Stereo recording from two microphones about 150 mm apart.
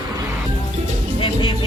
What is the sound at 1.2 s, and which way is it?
Music, 30° left (ahead or behind).